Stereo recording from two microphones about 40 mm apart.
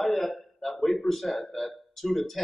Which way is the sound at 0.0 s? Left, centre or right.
Centre.